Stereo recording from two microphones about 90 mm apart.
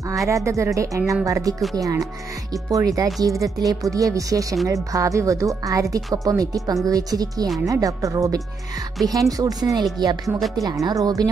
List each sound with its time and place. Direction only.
0.5 s a woman's voice: 35° right (ahead or behind)